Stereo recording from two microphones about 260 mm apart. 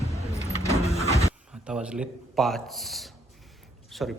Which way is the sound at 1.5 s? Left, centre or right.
Centre.